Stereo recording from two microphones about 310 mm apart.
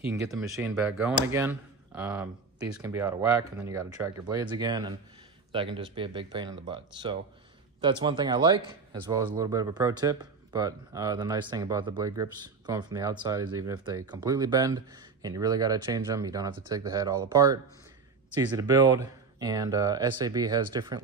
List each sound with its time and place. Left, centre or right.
0.1 s speech: centre
18.6 s speech: centre